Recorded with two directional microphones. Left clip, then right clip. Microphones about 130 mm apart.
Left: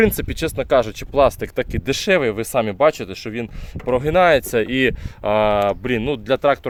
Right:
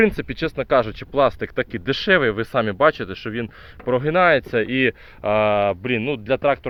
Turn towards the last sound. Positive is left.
turn(degrees=70)  # may be behind; listen again after turning